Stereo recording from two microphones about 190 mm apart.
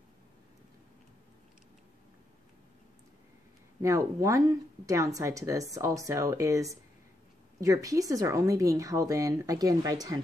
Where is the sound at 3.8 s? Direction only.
15° right (ahead or behind).